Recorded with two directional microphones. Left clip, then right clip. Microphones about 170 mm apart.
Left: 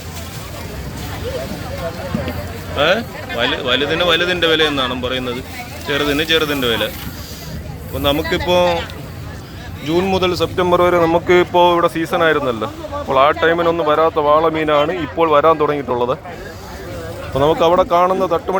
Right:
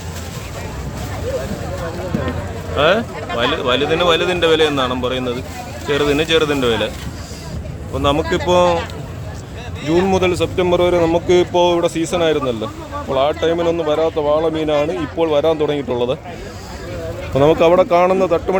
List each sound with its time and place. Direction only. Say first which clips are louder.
2.7 s speech: right 1 dB; 15° right (ahead or behind)
7.9 s speech: even; 15° right (ahead or behind)
9.8 s speech: right 1 dB; 15° right (ahead or behind)
17.3 s speech: right 1 dB; 30° right (ahead or behind)